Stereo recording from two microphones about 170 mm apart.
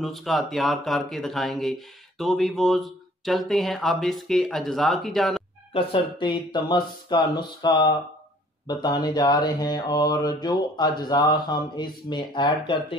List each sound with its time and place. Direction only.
0.0 s speech: centre (ahead or behind)
5.7 s mantra: 30° left (ahead or behind)